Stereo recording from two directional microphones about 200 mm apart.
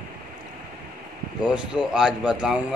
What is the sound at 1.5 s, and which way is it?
A man's voice, 5° right (ahead or behind).